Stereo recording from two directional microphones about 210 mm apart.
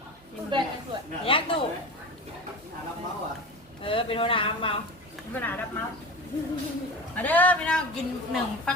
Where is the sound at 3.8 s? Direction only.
25° left (ahead or behind).